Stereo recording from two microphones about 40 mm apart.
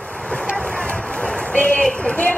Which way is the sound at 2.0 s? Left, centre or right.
Left.